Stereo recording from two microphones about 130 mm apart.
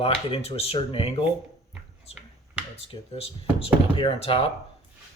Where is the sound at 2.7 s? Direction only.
50° left (ahead or behind).